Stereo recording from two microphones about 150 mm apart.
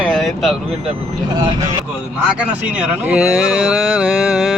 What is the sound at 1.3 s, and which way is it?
Speech, 25° right (ahead or behind).